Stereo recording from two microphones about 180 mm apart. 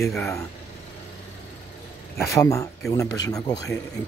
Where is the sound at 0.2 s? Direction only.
15° left (ahead or behind).